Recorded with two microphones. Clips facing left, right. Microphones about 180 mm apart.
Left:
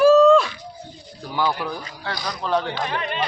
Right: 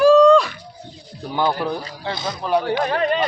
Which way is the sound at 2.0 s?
25° right (ahead or behind).